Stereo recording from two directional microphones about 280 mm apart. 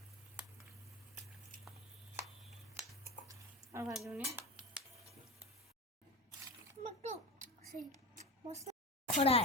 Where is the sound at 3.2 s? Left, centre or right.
Centre.